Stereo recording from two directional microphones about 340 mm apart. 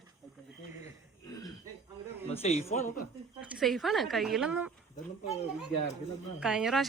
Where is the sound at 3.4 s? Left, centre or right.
Centre.